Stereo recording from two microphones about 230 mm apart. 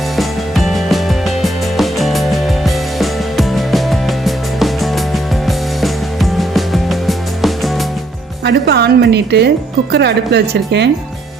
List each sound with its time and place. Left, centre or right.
0.2 s music: centre
8.4 s a woman's voice: right